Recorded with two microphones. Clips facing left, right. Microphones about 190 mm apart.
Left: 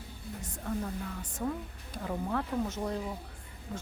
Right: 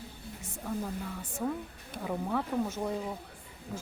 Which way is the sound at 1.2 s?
10° right (ahead or behind).